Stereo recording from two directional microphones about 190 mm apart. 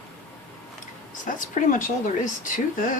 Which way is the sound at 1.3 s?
45° left (ahead or behind).